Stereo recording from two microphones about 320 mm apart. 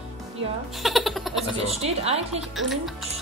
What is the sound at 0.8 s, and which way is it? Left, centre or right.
Speech, centre.